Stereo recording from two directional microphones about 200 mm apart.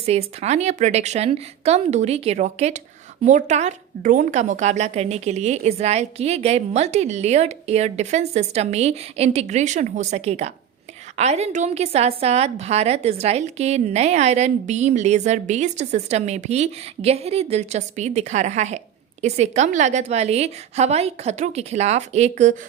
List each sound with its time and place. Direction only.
0.0 s a woman's voice: 30° right (ahead or behind)